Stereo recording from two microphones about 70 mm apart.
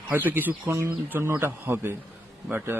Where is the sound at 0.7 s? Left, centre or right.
Right.